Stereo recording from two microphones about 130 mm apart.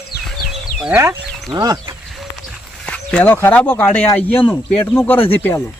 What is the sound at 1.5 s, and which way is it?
Speech, 30° right (ahead or behind).